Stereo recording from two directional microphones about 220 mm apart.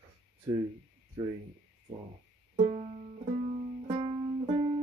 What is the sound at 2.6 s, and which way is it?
Music, 30° right (ahead or behind).